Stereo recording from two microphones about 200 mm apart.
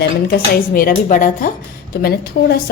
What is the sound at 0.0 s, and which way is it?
Speech, 50° left (ahead or behind).